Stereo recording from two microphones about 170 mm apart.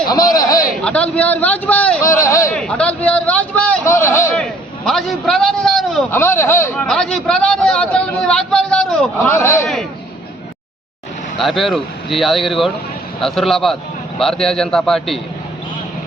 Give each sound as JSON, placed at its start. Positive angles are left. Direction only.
{"t": 0.1, "sound": "a sound", "side_deg": 20}
{"t": 0.7, "sound": "a man's voice", "side_deg": 5}
{"t": 2.6, "sound": "a man's voice", "side_deg": 5}
{"t": 4.4, "sound": "a man's voice", "side_deg": 0}
{"t": 6.1, "sound": "a man's voice", "side_deg": 15}
{"t": 6.8, "sound": "a man's voice", "side_deg": 0}
{"t": 11.3, "sound": "a man's voice", "side_deg": 0}